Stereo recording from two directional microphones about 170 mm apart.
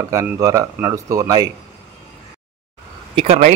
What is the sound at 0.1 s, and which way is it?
A man's voice, 20° right (ahead or behind).